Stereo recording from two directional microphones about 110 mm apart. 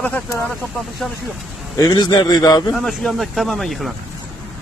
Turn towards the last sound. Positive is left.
turn(degrees=0)  # may be behind; listen again after turning